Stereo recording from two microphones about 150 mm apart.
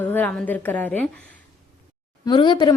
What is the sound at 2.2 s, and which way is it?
Speech, 30° left (ahead or behind).